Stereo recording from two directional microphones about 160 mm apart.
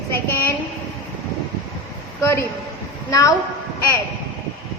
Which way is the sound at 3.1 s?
20° left (ahead or behind).